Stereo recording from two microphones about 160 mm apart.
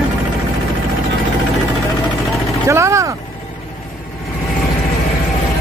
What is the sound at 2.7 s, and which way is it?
Speech, 20° right (ahead or behind).